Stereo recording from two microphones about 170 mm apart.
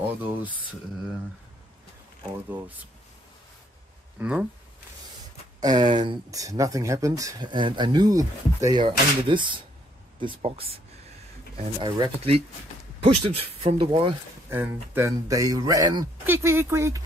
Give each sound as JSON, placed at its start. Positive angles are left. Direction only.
{"t": 4.2, "sound": "speech", "side_deg": -5}
{"t": 5.6, "sound": "speech", "side_deg": -25}
{"t": 14.5, "sound": "speech", "side_deg": -15}